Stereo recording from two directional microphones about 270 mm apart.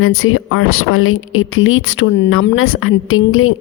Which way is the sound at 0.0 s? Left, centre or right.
Left.